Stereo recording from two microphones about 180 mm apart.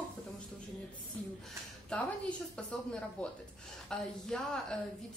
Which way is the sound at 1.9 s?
5° left (ahead or behind).